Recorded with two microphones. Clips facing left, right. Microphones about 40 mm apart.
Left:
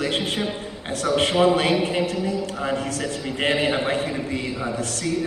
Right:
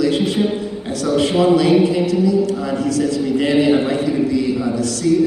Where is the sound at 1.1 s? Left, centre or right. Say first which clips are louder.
Right 4 dB; left.